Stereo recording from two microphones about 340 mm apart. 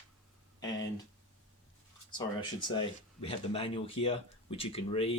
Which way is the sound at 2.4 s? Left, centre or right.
Centre.